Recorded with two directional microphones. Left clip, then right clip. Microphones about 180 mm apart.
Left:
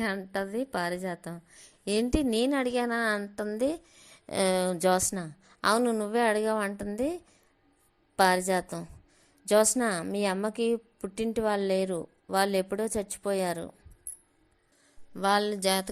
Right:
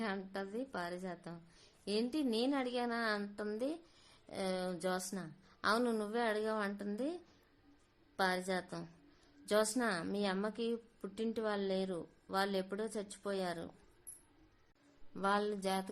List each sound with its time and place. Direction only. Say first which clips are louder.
0.0 s a woman's voice: left 10 dB; 30° left (ahead or behind)
15.1 s speech: left 9 dB; 25° left (ahead or behind)